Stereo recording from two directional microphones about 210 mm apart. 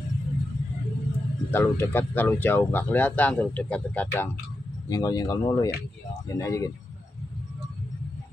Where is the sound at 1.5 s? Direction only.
10° left (ahead or behind).